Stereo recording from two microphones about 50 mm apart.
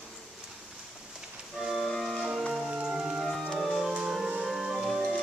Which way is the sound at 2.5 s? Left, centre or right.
Centre.